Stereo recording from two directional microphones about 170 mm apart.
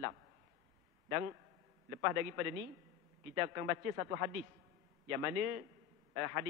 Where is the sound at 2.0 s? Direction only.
15° right (ahead or behind).